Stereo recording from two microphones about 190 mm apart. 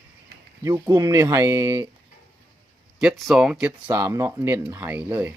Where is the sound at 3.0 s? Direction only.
Centre (ahead or behind).